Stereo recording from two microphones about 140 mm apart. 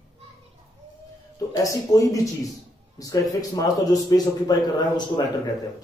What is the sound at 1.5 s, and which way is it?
A man's voice, 25° left (ahead or behind).